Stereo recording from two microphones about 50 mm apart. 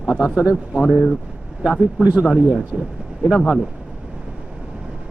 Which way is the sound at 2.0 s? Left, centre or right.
Right.